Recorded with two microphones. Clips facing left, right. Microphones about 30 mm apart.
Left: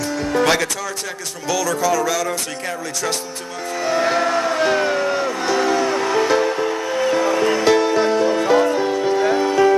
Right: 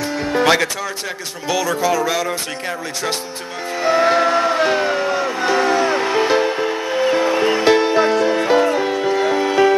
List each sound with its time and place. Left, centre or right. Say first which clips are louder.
0.3 s music: right 2 dB; right
3.8 s vehicle: right 4 dB; right
4.6 s speech: even; centre
5.4 s music: right 3 dB; right
8.8 s music: even; right
9.4 s music: right 1 dB; right